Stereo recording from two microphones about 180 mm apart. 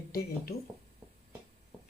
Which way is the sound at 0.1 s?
55° left (ahead or behind).